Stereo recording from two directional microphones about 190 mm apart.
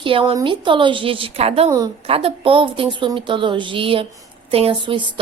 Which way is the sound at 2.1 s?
30° right (ahead or behind).